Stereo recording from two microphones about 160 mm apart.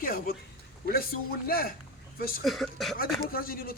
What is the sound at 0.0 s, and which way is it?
Speech, 65° left (ahead or behind).